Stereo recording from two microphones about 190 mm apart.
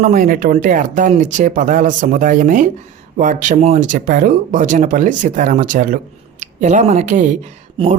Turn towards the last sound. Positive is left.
turn(degrees=-35)  # may be behind; listen again after turning